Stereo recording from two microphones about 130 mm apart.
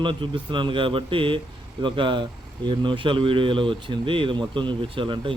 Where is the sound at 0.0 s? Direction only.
40° right (ahead or behind).